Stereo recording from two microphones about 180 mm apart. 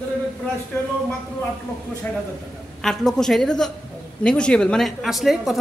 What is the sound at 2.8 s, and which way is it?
Speech, centre (ahead or behind).